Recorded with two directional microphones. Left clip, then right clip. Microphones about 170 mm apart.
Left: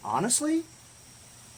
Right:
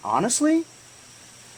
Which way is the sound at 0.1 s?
35° right (ahead or behind).